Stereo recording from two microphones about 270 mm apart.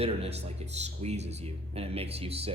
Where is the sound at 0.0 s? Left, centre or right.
Right.